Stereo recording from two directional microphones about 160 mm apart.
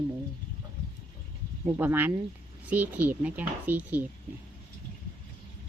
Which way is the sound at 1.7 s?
10° right (ahead or behind).